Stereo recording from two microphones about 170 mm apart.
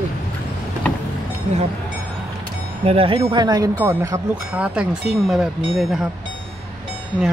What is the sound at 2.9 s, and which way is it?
Speech, 35° right (ahead or behind).